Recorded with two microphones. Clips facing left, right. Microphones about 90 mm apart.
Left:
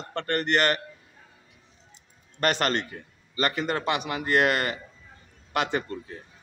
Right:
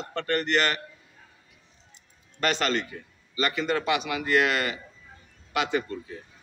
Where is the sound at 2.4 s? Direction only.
50° left (ahead or behind).